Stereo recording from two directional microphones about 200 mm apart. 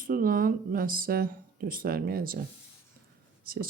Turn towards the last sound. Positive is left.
turn(degrees=-45)  # may be behind; listen again after turning